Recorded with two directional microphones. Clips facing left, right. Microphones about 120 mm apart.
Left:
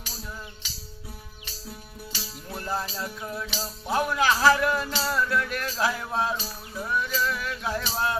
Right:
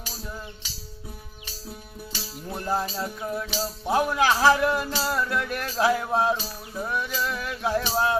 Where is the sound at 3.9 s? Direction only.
20° right (ahead or behind).